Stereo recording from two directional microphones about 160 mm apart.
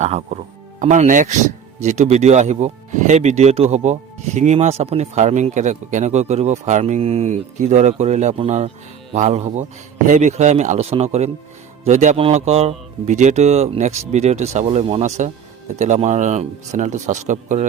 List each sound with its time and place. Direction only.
0.0 s speech: 45° right (ahead or behind)